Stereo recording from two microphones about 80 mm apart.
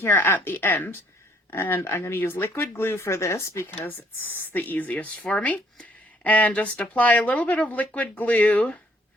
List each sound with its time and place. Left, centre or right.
0.0 s speech: left
3.8 s speech: left